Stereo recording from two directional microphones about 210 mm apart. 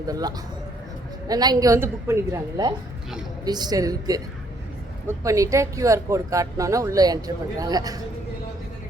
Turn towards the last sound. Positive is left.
turn(degrees=-15)  # may be behind; listen again after turning